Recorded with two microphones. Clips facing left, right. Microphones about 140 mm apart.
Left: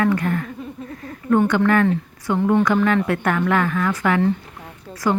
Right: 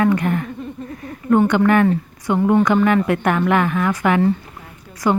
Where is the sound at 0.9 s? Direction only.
15° right (ahead or behind).